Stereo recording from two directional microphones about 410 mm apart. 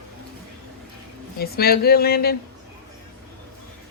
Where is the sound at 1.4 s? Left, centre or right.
Left.